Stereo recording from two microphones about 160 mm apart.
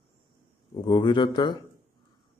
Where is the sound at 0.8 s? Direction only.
30° left (ahead or behind).